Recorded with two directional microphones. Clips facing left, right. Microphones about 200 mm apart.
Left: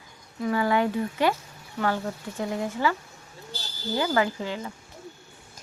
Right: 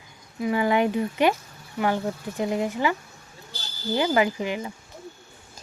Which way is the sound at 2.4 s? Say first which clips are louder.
Right 2 dB; 20° right (ahead or behind).